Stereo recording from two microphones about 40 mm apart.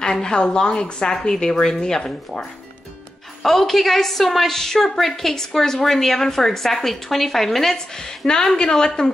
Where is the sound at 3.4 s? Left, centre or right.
Centre.